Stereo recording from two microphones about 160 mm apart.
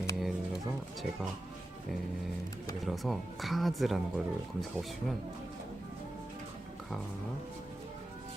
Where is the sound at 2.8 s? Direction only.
Centre (ahead or behind).